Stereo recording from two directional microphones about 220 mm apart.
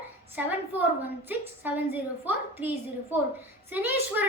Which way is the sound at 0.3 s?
10° right (ahead or behind).